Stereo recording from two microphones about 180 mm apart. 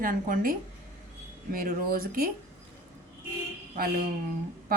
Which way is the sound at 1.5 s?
55° right (ahead or behind).